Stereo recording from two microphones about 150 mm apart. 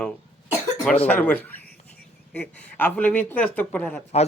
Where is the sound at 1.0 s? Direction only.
10° left (ahead or behind).